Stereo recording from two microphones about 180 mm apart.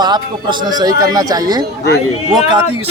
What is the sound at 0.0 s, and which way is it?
Speech, 25° right (ahead or behind).